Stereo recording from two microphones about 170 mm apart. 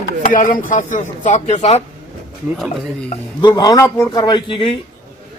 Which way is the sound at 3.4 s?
25° left (ahead or behind).